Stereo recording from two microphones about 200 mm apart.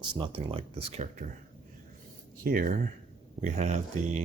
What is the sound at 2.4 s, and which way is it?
Speech, 45° right (ahead or behind).